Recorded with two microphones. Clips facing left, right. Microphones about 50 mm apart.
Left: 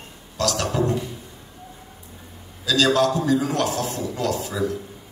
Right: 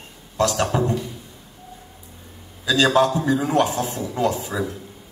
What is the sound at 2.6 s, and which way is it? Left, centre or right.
A man's voice, right.